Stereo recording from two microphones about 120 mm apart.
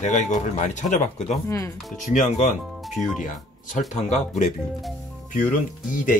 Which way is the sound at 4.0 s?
70° left (ahead or behind).